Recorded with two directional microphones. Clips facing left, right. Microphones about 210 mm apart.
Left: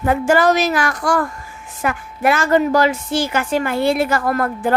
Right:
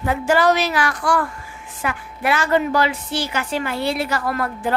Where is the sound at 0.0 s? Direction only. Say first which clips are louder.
Left 3 dB; 50° left (ahead or behind).